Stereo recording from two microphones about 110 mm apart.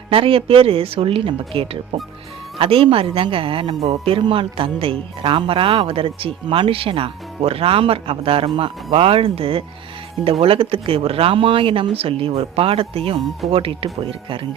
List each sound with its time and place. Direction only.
0.1 s speech: 55° right (ahead or behind)